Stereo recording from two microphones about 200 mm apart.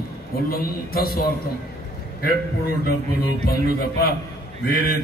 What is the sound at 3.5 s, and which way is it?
Speech, 50° left (ahead or behind).